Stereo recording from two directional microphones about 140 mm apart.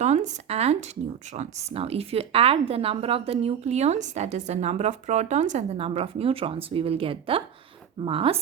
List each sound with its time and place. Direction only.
0.0 s a woman's voice: 55° right (ahead or behind)